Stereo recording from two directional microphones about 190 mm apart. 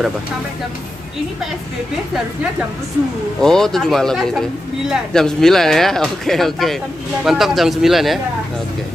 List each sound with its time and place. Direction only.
3.3 s speech: centre (ahead or behind)